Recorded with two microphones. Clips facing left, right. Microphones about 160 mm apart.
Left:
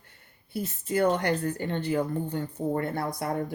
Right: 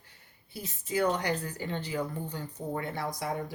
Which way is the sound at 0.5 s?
55° left (ahead or behind).